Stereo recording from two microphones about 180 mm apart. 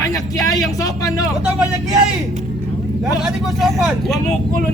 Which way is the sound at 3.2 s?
Centre (ahead or behind).